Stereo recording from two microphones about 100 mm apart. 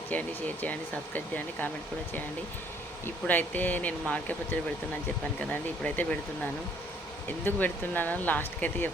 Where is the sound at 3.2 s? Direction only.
15° left (ahead or behind).